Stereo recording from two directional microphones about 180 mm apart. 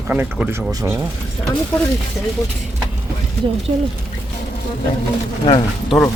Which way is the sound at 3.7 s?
30° right (ahead or behind).